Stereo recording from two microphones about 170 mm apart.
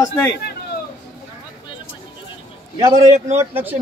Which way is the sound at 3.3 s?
10° right (ahead or behind).